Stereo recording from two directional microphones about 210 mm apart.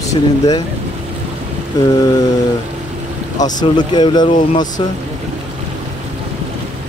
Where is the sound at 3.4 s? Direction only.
20° left (ahead or behind).